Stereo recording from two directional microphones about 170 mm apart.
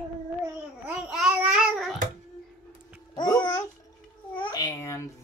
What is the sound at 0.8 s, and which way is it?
Babbling, 5° right (ahead or behind).